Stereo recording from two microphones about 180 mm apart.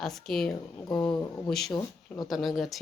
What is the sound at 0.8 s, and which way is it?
Speech, 25° left (ahead or behind).